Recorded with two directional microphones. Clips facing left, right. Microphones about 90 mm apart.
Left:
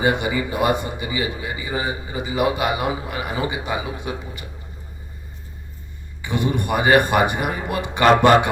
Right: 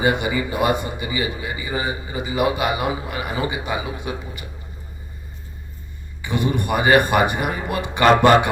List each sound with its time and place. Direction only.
0.0 s a man's voice: 35° left (ahead or behind)
6.2 s speech: 20° left (ahead or behind)